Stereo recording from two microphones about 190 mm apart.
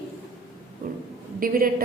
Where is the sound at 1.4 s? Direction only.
50° right (ahead or behind).